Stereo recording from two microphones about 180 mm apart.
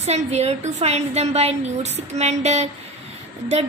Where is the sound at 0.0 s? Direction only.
35° right (ahead or behind).